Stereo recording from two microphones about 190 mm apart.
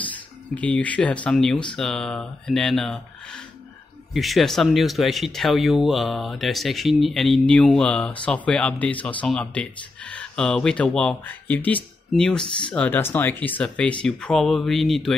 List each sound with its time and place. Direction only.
0.6 s speech: 5° left (ahead or behind)